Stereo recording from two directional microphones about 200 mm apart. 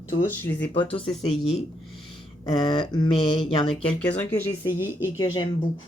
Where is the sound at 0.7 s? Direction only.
25° left (ahead or behind).